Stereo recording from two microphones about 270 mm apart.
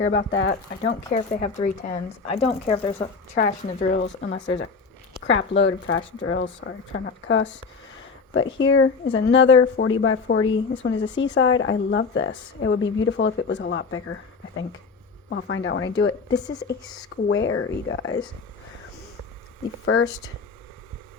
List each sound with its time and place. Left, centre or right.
0.0 s speech: left
1.1 s speech: left
3.9 s a woman's voice: left
19.8 s speech: left